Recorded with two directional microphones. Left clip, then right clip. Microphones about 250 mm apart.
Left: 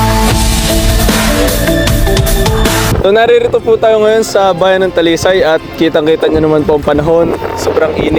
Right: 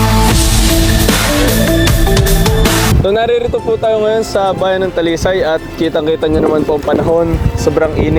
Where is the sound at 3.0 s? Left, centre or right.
Left.